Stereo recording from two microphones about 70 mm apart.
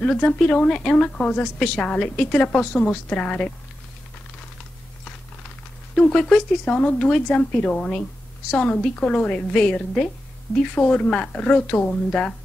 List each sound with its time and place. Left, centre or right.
0.0 s a woman's voice: centre
5.9 s a woman's voice: centre